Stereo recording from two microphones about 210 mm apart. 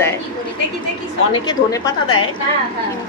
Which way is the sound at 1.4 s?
20° left (ahead or behind).